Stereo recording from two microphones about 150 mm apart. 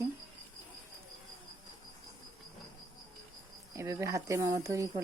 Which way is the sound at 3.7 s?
20° right (ahead or behind).